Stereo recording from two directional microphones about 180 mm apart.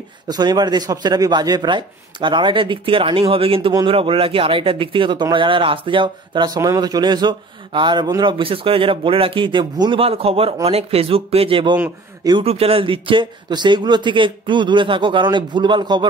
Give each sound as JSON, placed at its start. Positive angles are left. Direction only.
{"t": 0.3, "sound": "speech", "side_deg": -25}